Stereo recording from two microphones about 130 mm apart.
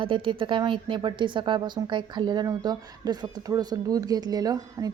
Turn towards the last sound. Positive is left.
turn(degrees=-30)  # may be behind; listen again after turning